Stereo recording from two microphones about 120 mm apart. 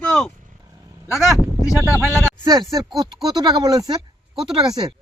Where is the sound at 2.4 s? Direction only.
35° right (ahead or behind).